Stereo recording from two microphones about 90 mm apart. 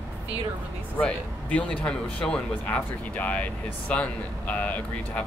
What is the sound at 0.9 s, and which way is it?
Speech, 15° left (ahead or behind).